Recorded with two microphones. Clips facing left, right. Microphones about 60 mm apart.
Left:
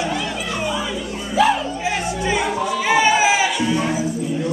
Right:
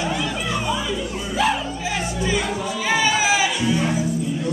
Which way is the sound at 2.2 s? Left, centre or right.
Left.